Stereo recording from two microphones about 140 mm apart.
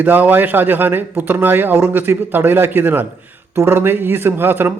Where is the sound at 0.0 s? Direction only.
10° right (ahead or behind).